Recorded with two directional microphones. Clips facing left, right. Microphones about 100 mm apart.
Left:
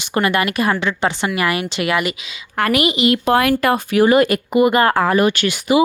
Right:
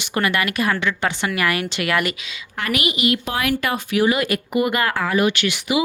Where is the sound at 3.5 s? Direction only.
40° left (ahead or behind).